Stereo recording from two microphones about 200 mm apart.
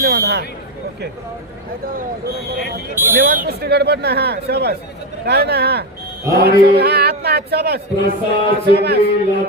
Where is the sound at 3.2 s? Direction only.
50° right (ahead or behind).